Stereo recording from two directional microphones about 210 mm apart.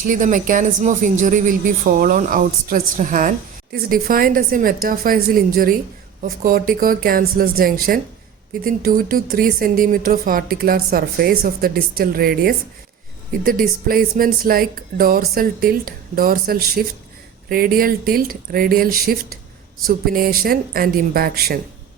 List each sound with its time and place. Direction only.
0.0 s speech: 40° right (ahead or behind)